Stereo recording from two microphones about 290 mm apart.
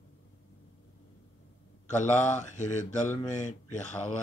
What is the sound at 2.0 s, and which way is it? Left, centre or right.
Speech, left.